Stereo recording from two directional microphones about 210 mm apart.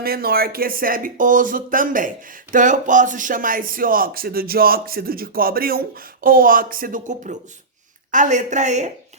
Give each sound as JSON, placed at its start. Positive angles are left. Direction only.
{"t": 0.0, "sound": "speech", "side_deg": -45}